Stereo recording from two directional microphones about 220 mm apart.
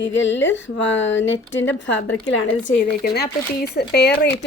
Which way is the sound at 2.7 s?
45° left (ahead or behind).